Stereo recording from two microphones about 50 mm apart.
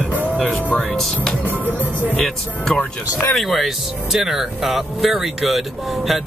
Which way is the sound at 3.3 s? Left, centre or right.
Centre.